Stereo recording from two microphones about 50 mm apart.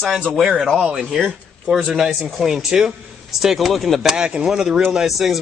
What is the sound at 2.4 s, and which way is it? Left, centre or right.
Speech, centre.